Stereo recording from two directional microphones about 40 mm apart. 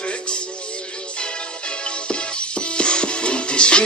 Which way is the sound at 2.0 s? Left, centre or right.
Left.